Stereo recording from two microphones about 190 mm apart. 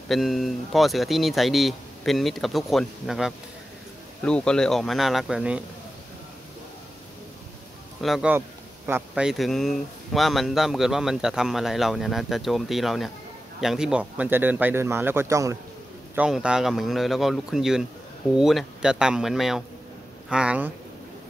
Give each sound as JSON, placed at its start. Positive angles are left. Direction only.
{"t": 0.1, "sound": "speech", "side_deg": 0}
{"t": 8.0, "sound": "a man's voice", "side_deg": -5}
{"t": 16.2, "sound": "speech", "side_deg": -5}